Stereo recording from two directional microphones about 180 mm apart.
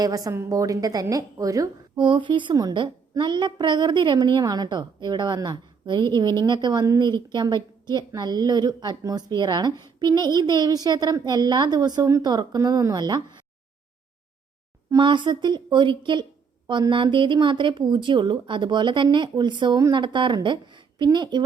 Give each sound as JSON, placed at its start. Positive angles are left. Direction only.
{"t": 0.0, "sound": "a woman's voice", "side_deg": -20}
{"t": 14.8, "sound": "a woman's voice", "side_deg": -25}